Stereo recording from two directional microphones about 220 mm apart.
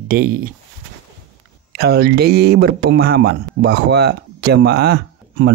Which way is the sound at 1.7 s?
50° right (ahead or behind).